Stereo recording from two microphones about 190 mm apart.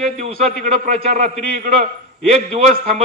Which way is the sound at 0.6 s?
40° right (ahead or behind).